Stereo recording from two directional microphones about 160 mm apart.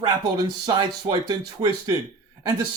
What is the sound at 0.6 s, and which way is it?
Speech, 25° right (ahead or behind).